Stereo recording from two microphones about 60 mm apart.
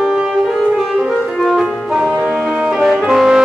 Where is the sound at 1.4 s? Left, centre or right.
Centre.